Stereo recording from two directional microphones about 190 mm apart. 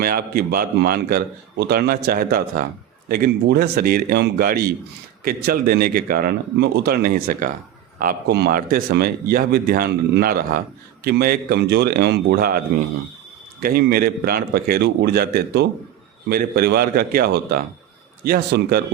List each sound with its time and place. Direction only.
0.0 s a man's voice: 50° right (ahead or behind)